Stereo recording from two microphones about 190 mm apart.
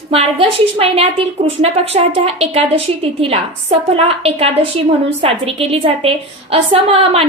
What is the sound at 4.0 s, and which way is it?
A woman's voice, 30° right (ahead or behind).